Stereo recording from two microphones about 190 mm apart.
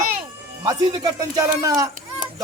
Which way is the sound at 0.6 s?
20° right (ahead or behind).